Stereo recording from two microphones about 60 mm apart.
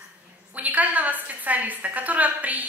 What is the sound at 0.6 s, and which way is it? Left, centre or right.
A woman's voice, right.